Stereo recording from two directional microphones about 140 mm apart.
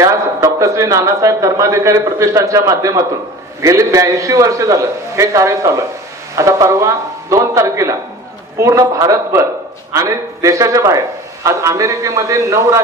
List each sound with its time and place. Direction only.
0.0 s a man's voice: 25° right (ahead or behind)